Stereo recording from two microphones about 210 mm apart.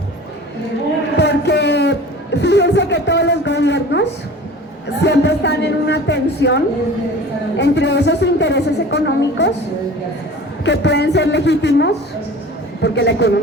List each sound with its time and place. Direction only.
1.1 s speech: 55° left (ahead or behind)
5.0 s a woman's voice: 55° left (ahead or behind)
10.7 s a woman's voice: 55° left (ahead or behind)